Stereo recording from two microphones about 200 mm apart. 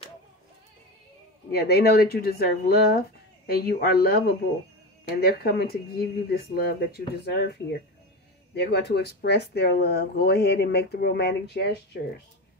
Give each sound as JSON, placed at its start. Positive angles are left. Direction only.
{"t": 1.5, "sound": "speech", "side_deg": 55}
{"t": 5.2, "sound": "speech", "side_deg": 50}
{"t": 8.5, "sound": "speech", "side_deg": 55}